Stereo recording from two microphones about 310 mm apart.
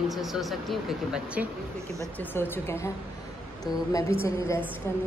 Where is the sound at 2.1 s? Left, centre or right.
Centre.